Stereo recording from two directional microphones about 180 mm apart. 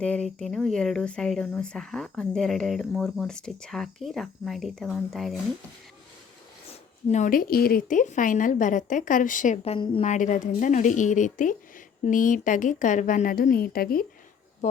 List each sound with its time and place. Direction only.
0.0 s speech: 5° left (ahead or behind)
7.1 s speech: 45° left (ahead or behind)
9.7 s a woman's voice: 30° left (ahead or behind)
10.1 s speech: 45° left (ahead or behind)
14.6 s speech: 40° left (ahead or behind)